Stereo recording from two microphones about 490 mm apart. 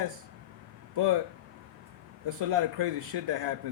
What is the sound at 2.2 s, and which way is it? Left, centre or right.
Speech, right.